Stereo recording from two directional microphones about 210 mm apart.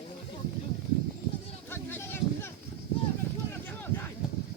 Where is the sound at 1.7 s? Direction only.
10° left (ahead or behind).